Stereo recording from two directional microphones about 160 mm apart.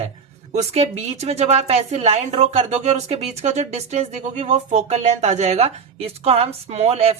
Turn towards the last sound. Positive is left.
turn(degrees=-40)  # may be behind; listen again after turning